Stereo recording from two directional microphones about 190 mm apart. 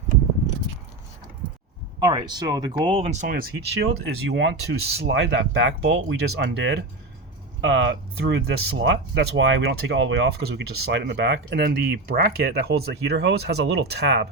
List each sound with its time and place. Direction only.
2.0 s speech: 20° right (ahead or behind); by 3.4 s 45° right (ahead or behind)
3.8 s speech: 65° right (ahead or behind)